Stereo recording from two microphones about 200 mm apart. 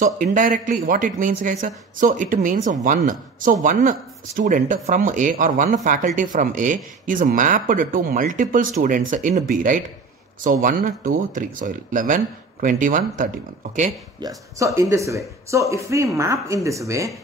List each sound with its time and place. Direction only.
0.0 s speech: 40° right (ahead or behind)
14.2 s speech: 15° right (ahead or behind)